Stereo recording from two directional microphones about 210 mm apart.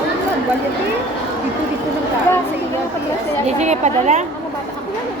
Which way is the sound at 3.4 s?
30° right (ahead or behind).